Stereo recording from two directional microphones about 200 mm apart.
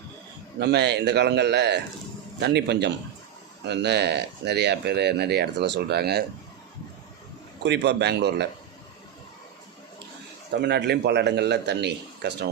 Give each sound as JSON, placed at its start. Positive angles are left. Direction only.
{"t": 0.6, "sound": "speech", "side_deg": -55}
{"t": 7.6, "sound": "speech", "side_deg": -60}
{"t": 10.5, "sound": "speech", "side_deg": -55}